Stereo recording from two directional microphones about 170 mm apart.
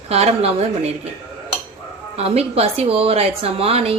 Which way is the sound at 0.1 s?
35° right (ahead or behind).